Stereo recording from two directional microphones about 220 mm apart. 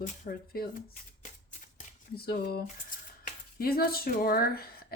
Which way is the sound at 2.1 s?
45° left (ahead or behind).